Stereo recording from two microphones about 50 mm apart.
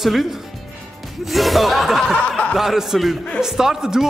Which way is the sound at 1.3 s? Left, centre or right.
Centre.